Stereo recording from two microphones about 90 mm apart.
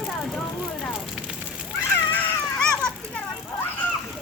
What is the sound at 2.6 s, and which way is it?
Children playing, 10° left (ahead or behind).